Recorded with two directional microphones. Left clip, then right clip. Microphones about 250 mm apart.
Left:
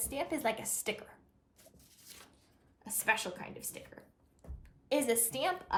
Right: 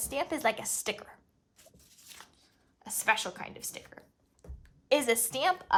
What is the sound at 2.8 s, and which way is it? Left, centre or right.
Speech, centre.